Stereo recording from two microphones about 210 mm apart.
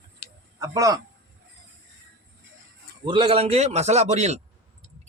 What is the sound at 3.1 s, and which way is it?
A man's voice, 25° right (ahead or behind).